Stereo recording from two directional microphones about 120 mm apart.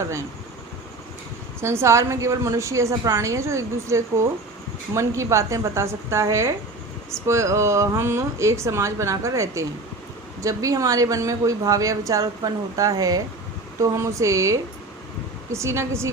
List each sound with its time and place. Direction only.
1.6 s speech: 20° right (ahead or behind)